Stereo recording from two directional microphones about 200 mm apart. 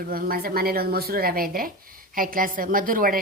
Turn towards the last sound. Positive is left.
turn(degrees=-45)  # may be behind; listen again after turning